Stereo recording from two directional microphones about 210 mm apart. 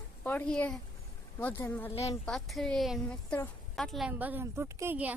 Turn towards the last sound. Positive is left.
turn(degrees=-10)  # may be behind; listen again after turning